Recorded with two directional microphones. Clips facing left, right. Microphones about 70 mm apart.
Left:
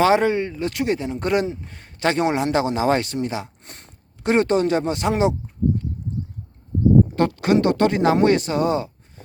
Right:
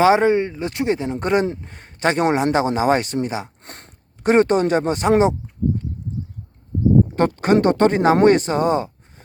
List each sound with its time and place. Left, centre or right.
0.0 s a man's voice: right
3.6 s a sound: right
4.2 s speech: right
7.2 s speech: right